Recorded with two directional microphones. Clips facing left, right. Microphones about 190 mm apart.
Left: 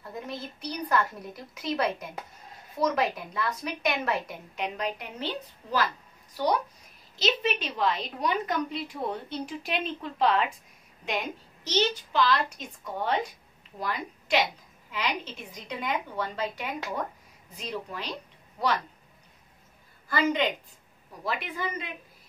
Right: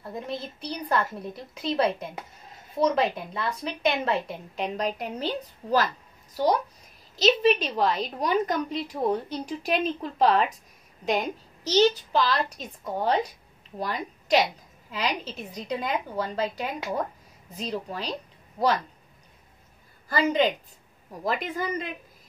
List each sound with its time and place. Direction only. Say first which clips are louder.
0.0 s a woman's voice: right 3 dB; 30° right (ahead or behind)
7.2 s a woman's voice: right 7 dB; 40° right (ahead or behind)
20.1 s a woman's voice: right 3 dB; 35° right (ahead or behind)